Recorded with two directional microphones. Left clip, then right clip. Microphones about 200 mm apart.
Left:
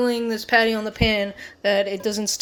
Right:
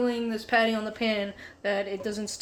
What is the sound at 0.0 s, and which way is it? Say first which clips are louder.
Speech: left 6 dB; 45° left (ahead or behind).